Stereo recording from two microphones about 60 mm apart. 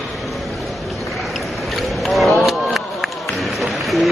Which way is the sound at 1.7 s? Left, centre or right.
Centre.